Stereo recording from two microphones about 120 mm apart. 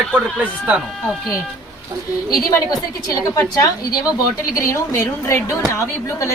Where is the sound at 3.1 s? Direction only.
30° left (ahead or behind).